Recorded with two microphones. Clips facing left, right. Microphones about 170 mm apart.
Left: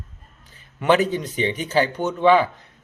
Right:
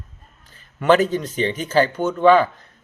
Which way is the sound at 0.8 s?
15° left (ahead or behind).